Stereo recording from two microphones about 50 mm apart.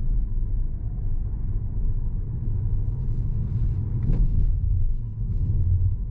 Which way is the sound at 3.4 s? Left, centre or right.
Centre.